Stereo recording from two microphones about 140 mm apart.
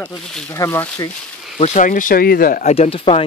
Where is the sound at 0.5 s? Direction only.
20° left (ahead or behind).